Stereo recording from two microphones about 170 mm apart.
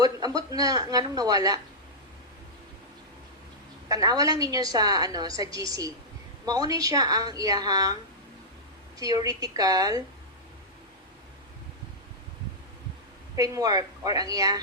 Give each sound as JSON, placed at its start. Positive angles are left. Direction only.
{"t": 0.0, "sound": "a woman's voice", "side_deg": -20}
{"t": 3.8, "sound": "a woman's voice", "side_deg": -20}
{"t": 9.0, "sound": "a woman's voice", "side_deg": -20}
{"t": 13.3, "sound": "a woman's voice", "side_deg": -20}